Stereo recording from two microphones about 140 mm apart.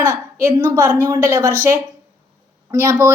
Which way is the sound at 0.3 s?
20° right (ahead or behind).